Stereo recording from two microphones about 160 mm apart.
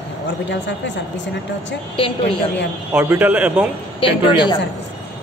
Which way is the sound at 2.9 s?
10° right (ahead or behind).